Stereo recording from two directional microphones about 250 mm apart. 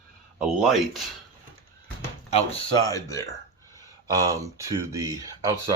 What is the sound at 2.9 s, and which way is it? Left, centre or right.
Speech, centre.